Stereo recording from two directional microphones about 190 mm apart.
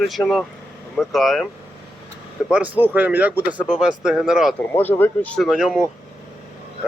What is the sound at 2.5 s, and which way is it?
Speech, 5° right (ahead or behind).